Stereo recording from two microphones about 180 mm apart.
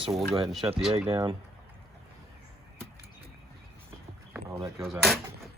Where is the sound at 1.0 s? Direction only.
25° right (ahead or behind).